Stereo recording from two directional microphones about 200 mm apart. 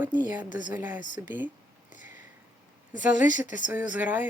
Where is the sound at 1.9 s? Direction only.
40° left (ahead or behind).